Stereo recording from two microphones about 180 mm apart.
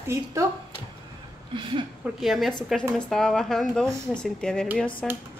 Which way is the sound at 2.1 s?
Centre (ahead or behind).